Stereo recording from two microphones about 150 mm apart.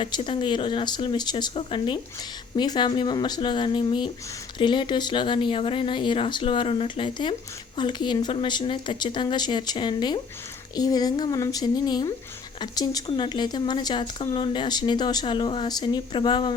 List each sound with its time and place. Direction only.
0.0 s speech: 35° left (ahead or behind)